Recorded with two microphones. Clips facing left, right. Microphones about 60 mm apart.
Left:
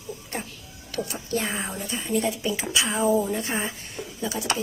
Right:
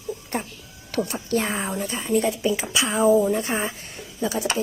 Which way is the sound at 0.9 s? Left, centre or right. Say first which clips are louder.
Right 4 dB; right.